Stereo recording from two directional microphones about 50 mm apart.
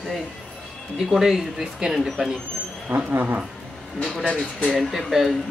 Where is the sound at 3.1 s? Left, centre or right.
Right.